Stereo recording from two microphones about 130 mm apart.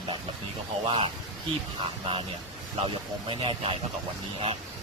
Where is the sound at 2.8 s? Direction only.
40° right (ahead or behind).